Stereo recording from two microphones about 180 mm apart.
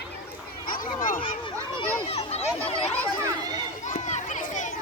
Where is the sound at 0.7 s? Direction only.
50° left (ahead or behind).